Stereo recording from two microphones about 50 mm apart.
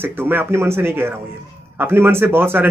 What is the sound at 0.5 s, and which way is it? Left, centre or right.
Speech, right.